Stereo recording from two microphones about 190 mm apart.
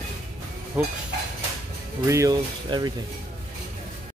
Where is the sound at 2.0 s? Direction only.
15° right (ahead or behind).